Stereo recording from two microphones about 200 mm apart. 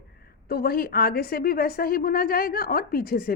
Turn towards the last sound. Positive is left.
turn(degrees=45)  # may be behind; listen again after turning